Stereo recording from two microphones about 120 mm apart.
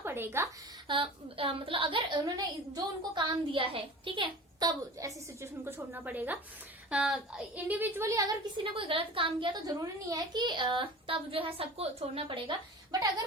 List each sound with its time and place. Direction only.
0.0 s a woman's voice: 20° right (ahead or behind)
0.9 s a woman's voice: 45° right (ahead or behind); by 8.4 s 30° right (ahead or behind)
8.7 s a woman's voice: 45° right (ahead or behind)